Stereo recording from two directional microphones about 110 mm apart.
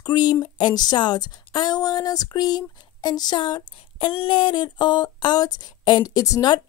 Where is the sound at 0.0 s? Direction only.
40° left (ahead or behind).